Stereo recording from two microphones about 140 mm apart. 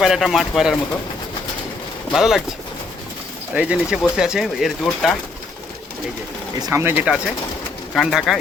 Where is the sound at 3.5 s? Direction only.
5° right (ahead or behind).